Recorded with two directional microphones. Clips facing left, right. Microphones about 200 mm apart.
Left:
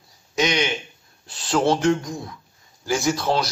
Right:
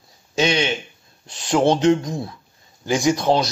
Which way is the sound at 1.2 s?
15° right (ahead or behind).